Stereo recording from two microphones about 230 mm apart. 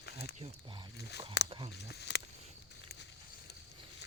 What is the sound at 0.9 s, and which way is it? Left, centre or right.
Speech, left.